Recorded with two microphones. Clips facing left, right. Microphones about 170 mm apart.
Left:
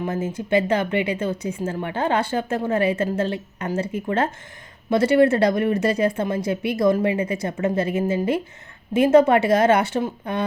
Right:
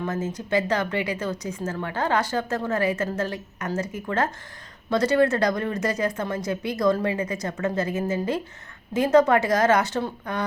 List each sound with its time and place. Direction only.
0.5 s a woman's voice: 25° left (ahead or behind)